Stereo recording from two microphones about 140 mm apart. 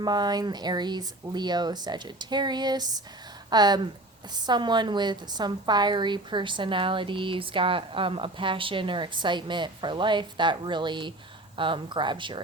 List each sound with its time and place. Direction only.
0.0 s a woman's voice: 30° right (ahead or behind)